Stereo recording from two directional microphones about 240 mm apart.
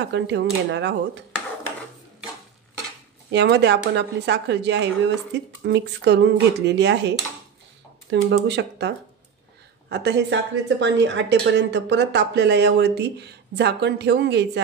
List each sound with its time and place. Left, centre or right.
0.0 s a woman's voice: right
3.3 s a woman's voice: right